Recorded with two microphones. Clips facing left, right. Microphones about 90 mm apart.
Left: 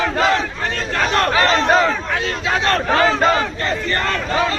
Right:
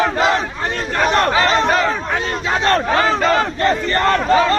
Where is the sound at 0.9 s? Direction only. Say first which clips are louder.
Right 2 dB; 20° right (ahead or behind).